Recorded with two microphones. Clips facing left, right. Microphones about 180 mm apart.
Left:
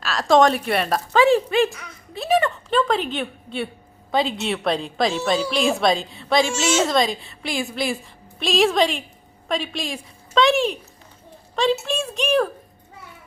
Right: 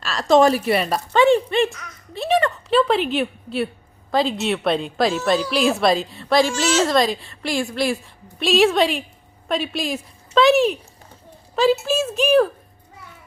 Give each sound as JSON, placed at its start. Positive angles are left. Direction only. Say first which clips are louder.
{"t": 0.0, "sound": "a woman's voice", "louder": "right 1 dB", "side_deg": 0}
{"t": 1.7, "sound": "a woman's voice", "louder": "even", "side_deg": 10}
{"t": 2.1, "sound": "a sound", "louder": "right 1 dB", "side_deg": 0}
{"t": 4.1, "sound": "a woman's voice", "louder": "right 2 dB", "side_deg": 0}